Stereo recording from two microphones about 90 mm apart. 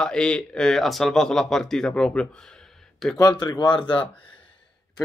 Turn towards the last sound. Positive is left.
turn(degrees=60)  # may be behind; listen again after turning